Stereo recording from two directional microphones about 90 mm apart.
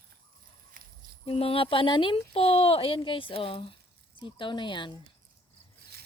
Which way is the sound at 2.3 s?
90° left.